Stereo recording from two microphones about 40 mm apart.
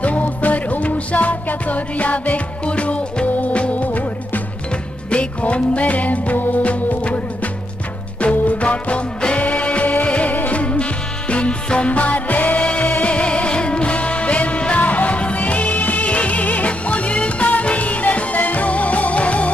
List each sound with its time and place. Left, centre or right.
0.0 s music: left
8.2 s music: left